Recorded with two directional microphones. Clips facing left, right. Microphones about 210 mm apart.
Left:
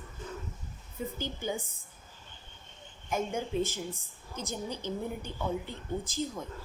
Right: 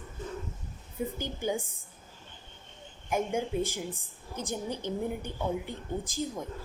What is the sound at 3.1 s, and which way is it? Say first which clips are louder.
Speech: right 2 dB; 15° right (ahead or behind).